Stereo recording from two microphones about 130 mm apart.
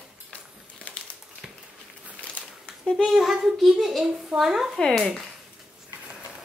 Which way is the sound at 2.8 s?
Centre (ahead or behind).